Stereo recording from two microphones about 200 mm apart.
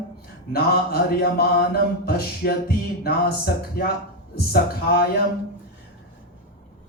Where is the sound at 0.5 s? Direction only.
50° left (ahead or behind).